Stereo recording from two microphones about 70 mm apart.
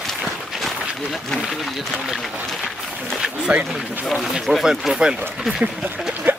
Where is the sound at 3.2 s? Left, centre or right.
Centre.